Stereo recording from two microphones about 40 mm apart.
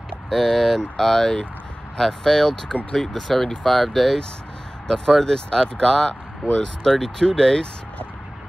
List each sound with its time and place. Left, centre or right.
0.3 s speech: centre
4.8 s speech: centre